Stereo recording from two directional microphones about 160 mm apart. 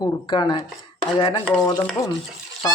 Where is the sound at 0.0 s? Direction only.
30° left (ahead or behind).